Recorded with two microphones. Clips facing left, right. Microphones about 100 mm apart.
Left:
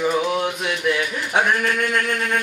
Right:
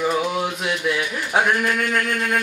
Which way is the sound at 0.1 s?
Centre (ahead or behind).